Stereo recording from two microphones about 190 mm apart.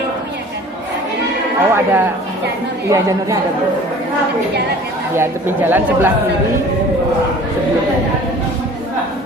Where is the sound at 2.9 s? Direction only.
15° right (ahead or behind).